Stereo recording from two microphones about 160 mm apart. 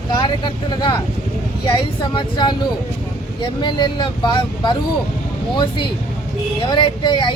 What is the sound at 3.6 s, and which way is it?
Speech, 30° left (ahead or behind).